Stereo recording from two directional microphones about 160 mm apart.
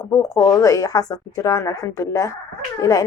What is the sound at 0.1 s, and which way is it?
A woman's voice, 20° left (ahead or behind).